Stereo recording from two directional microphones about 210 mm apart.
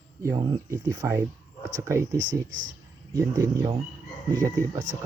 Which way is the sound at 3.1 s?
15° right (ahead or behind).